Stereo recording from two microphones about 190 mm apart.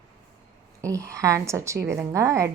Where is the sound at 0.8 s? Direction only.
15° right (ahead or behind).